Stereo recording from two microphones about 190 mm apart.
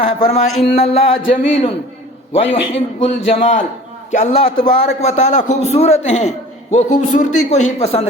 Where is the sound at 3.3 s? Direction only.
35° left (ahead or behind).